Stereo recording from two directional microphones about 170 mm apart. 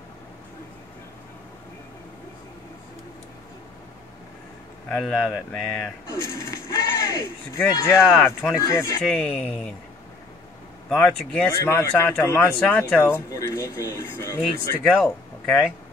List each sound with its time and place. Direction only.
4.8 s speech: 5° left (ahead or behind)
6.1 s speech: 20° left (ahead or behind)
9.1 s a man's voice: 5° left (ahead or behind)
10.9 s speech: 5° left (ahead or behind)
11.6 s a man's voice: 15° left (ahead or behind)
13.3 s speech: 20° left (ahead or behind)
14.8 s speech: centre (ahead or behind)